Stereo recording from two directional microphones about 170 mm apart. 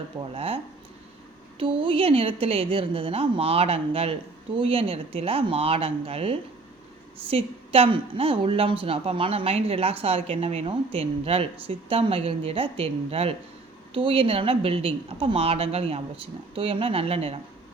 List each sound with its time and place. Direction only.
0.3 s a woman's voice: 35° right (ahead or behind)